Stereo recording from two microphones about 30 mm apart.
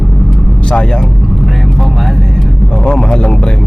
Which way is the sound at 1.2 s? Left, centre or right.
Centre.